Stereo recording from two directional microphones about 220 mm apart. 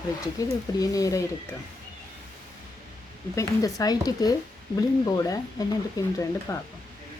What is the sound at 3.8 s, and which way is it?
Speech, 15° left (ahead or behind).